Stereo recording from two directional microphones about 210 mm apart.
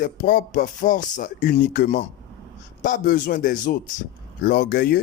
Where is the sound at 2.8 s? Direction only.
35° left (ahead or behind).